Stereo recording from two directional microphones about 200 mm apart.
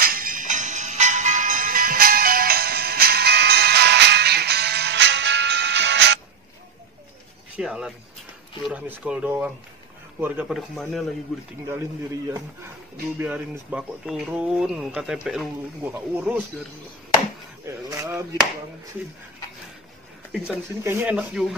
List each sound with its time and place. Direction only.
0.0 s music: 45° right (ahead or behind); by 6.1 s 60° right (ahead or behind)
7.5 s speech: 5° right (ahead or behind)
13.2 s speech: 10° right (ahead or behind)
17.6 s speech: 15° right (ahead or behind)
20.8 s speech: 5° right (ahead or behind)